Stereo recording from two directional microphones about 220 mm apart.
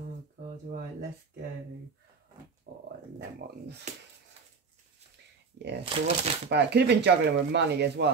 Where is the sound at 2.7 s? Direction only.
45° right (ahead or behind).